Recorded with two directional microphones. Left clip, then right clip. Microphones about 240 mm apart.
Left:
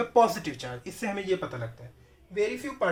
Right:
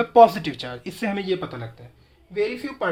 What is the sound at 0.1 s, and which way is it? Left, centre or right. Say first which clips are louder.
Speech: right 9 dB; right.